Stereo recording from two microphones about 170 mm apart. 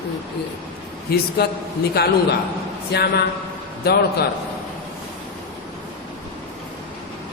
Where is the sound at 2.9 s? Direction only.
75° left (ahead or behind).